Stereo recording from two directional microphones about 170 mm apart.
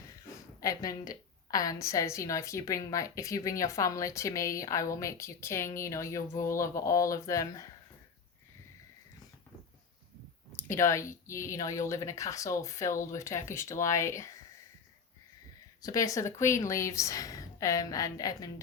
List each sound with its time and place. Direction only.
0.6 s a woman's voice: 20° left (ahead or behind)
10.6 s speech: 15° left (ahead or behind)
15.8 s a woman's voice: 20° left (ahead or behind)